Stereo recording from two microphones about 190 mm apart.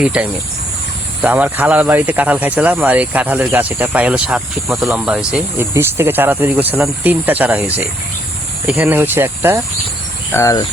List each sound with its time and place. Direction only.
0.0 s speech: 5° right (ahead or behind)
10.3 s cricket: 15° left (ahead or behind)